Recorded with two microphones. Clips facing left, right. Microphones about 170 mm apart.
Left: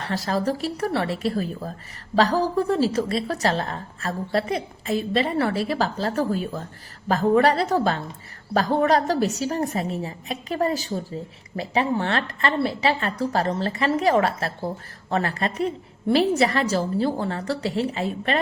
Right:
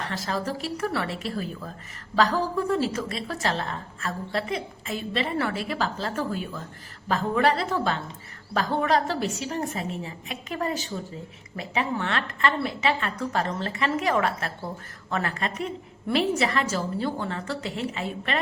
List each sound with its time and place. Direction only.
0.0 s a woman's voice: 35° left (ahead or behind)